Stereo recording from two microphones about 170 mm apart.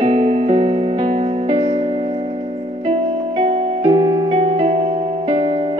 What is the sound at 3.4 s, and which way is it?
Music, 35° right (ahead or behind).